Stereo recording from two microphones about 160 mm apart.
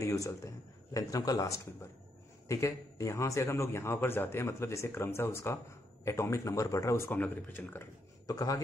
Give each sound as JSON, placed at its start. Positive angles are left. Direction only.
{"t": 0.0, "sound": "a man's voice", "side_deg": 20}